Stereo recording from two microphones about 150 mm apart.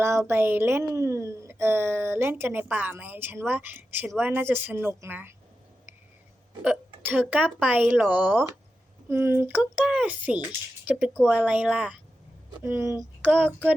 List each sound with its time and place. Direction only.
0.0 s a woman's voice: 15° right (ahead or behind)
6.6 s a woman's voice: 10° right (ahead or behind)
9.6 s a woman's voice: 5° right (ahead or behind)
11.1 s speech: 5° left (ahead or behind)
11.4 s a woman's voice: 5° right (ahead or behind)